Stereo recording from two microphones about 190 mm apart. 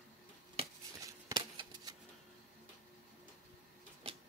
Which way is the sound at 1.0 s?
20° right (ahead or behind).